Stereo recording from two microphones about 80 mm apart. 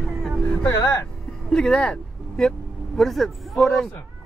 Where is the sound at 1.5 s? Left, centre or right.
Centre.